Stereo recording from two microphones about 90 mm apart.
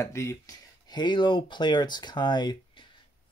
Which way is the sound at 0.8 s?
55° left (ahead or behind).